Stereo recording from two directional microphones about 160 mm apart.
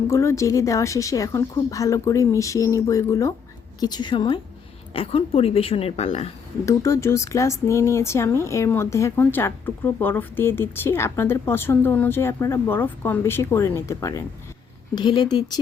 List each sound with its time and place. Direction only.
0.1 s a woman's voice: 15° left (ahead or behind); by 6.3 s 40° left (ahead or behind)
6.7 s a woman's voice: 20° left (ahead or behind)